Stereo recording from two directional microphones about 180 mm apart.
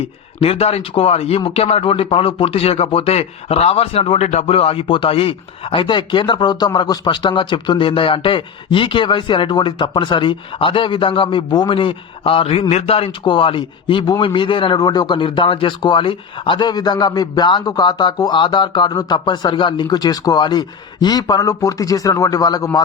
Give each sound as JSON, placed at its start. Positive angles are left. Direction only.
{"t": 0.0, "sound": "speech", "side_deg": 35}